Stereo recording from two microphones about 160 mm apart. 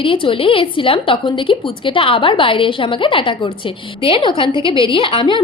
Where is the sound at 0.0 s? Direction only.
35° left (ahead or behind).